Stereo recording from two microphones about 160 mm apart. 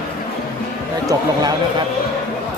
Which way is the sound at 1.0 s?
25° right (ahead or behind).